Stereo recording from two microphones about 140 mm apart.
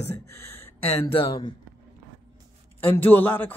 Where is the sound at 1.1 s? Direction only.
30° left (ahead or behind).